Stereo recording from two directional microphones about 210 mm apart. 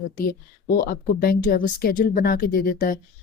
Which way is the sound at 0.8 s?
45° left (ahead or behind).